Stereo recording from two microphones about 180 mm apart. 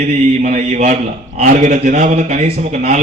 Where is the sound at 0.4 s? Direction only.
40° right (ahead or behind).